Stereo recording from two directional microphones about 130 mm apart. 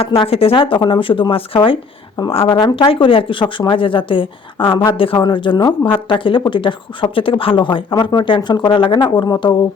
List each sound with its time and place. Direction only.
0.0 s speech: 45° left (ahead or behind)